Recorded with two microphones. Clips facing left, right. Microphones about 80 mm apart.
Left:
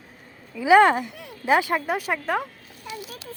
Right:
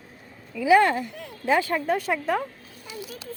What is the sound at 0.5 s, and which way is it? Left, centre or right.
Speech, left.